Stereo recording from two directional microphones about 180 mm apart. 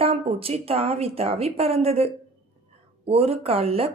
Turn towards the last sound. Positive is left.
turn(degrees=-35)  # may be behind; listen again after turning